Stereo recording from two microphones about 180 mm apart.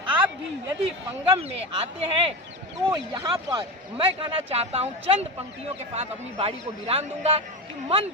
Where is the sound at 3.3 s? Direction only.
30° right (ahead or behind).